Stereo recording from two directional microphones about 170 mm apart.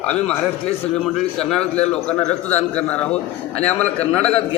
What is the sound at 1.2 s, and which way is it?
A man's voice, 5° left (ahead or behind).